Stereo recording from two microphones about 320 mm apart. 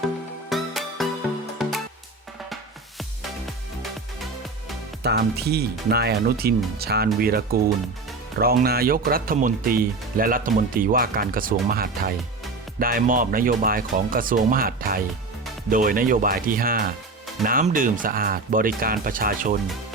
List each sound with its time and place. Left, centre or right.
0.5 s music: centre
5.0 s speech: right